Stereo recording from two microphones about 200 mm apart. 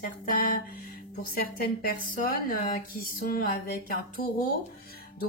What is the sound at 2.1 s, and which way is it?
Speech, 45° left (ahead or behind).